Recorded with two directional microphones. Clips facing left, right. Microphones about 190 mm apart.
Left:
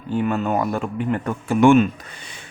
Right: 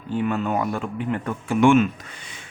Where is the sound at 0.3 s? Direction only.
40° left (ahead or behind).